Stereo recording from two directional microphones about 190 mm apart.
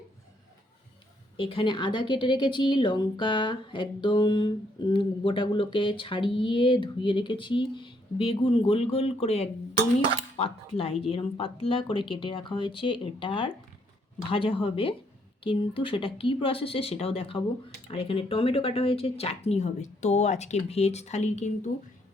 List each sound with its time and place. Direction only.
1.4 s a woman's voice: 25° left (ahead or behind)